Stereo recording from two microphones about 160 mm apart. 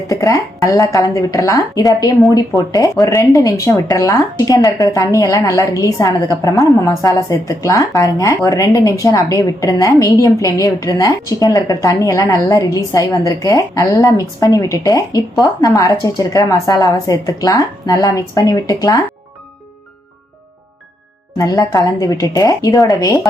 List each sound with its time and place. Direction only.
0.1 s a woman's voice: 20° left (ahead or behind)
21.3 s a woman's voice: 20° left (ahead or behind)